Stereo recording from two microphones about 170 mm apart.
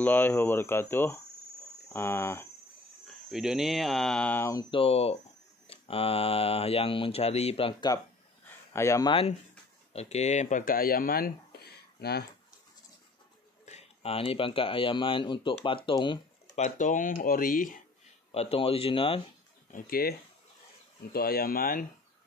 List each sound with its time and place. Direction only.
0.0 s speech: 10° left (ahead or behind)
3.3 s speech: centre (ahead or behind); by 4.6 s 15° left (ahead or behind)
4.6 s speech: 35° left (ahead or behind)
8.7 s speech: 20° left (ahead or behind)
9.9 s speech: 40° left (ahead or behind); by 12.3 s 75° left (ahead or behind)
13.7 s speech: 40° left (ahead or behind)
16.5 s speech: 45° left (ahead or behind)
18.3 s speech: 35° left (ahead or behind)
19.7 s speech: 60° left (ahead or behind)